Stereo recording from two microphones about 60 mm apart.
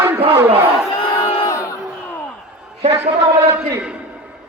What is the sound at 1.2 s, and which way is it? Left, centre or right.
Crowd, left.